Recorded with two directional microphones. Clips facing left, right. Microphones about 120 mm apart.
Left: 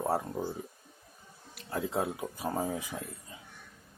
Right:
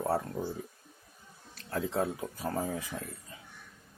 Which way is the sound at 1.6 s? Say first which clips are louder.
Right 1 dB; 10° left (ahead or behind).